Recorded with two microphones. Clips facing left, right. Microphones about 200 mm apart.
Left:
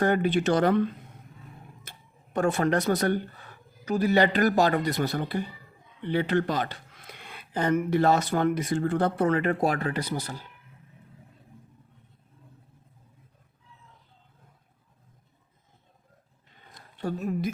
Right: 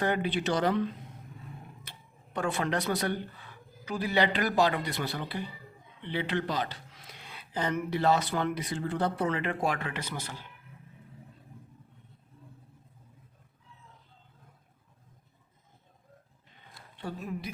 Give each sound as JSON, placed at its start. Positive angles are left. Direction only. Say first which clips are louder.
{"t": 0.0, "sound": "speech", "louder": "left 6 dB", "side_deg": 45}
{"t": 17.0, "sound": "speech", "louder": "left 8 dB", "side_deg": 45}